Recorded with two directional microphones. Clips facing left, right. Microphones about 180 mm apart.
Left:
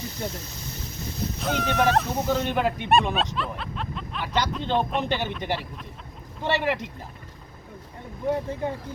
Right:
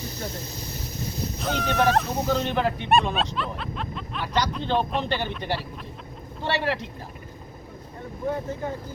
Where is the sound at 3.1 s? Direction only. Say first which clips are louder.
Even; centre (ahead or behind).